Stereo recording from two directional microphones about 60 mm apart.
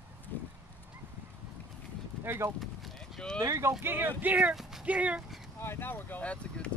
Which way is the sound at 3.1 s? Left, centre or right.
Centre.